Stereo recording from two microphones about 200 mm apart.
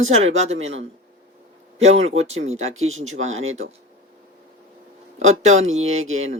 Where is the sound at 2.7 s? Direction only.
80° right.